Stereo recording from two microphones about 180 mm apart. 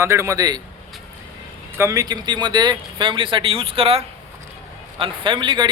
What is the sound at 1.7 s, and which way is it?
A man's voice, 15° right (ahead or behind).